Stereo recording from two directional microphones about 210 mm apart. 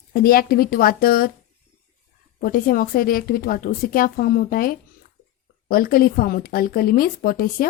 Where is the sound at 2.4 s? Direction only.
45° left (ahead or behind).